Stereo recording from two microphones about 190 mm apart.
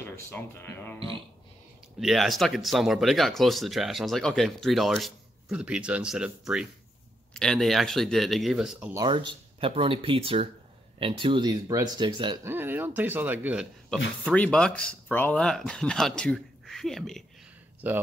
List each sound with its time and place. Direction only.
0.0 s speech: 10° left (ahead or behind)
2.0 s speech: centre (ahead or behind)
8.9 s speech: 25° right (ahead or behind)
12.4 s speech: 10° right (ahead or behind)
13.8 s speech: 5° left (ahead or behind)
17.8 s speech: 10° right (ahead or behind)